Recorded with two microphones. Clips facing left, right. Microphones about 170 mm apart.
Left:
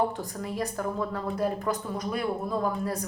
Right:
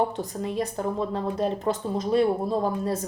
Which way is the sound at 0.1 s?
20° right (ahead or behind).